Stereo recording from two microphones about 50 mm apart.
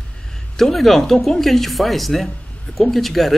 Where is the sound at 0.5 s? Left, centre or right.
Centre.